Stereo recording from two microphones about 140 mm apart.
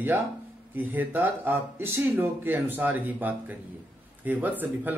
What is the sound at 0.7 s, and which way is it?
Speech, 15° right (ahead or behind).